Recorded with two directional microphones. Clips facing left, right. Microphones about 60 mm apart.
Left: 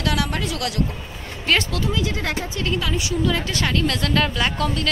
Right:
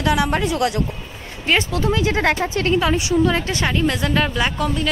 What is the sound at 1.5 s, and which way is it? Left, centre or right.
Speech, centre.